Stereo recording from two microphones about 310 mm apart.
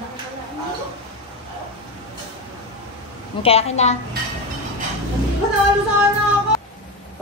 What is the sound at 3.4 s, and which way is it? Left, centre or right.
Speech, centre.